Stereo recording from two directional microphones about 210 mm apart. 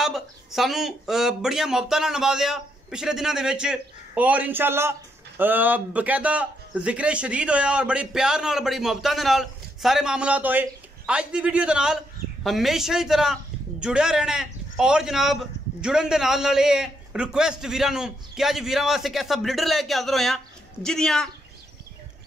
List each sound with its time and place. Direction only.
0.0 s speech: centre (ahead or behind)